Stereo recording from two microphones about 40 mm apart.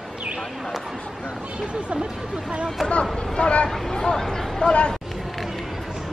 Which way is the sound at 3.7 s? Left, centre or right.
Centre.